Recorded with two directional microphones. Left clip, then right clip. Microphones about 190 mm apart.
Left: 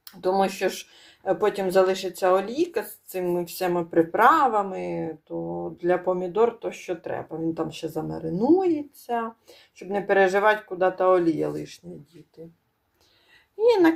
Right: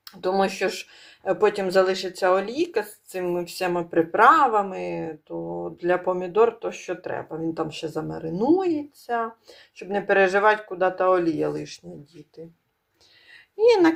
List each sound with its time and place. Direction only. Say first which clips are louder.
0.0 s speech: even; 5° right (ahead or behind)
13.6 s speech: right 2 dB; 5° right (ahead or behind)